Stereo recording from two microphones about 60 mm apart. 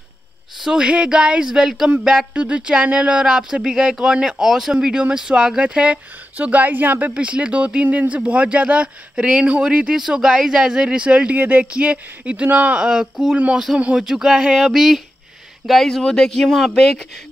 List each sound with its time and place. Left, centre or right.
0.6 s speech: centre
4.7 s speech: centre
14.0 s speech: centre